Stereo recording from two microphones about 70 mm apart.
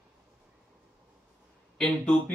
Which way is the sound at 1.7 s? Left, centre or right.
Centre.